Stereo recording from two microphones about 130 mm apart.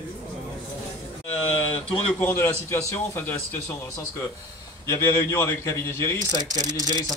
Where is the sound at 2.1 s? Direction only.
15° left (ahead or behind).